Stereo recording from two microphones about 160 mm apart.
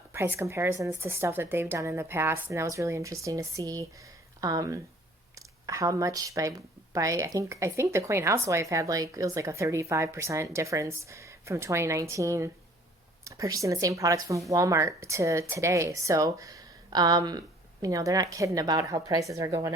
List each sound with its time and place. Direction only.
0.1 s speech: 15° right (ahead or behind)